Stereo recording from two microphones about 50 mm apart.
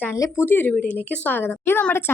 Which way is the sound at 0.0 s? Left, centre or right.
Left.